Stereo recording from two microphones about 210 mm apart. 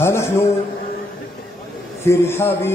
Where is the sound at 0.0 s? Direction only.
10° left (ahead or behind).